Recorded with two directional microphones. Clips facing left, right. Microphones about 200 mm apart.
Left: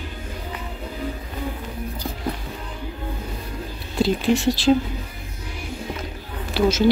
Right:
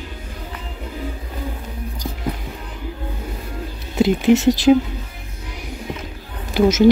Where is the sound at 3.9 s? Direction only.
20° right (ahead or behind).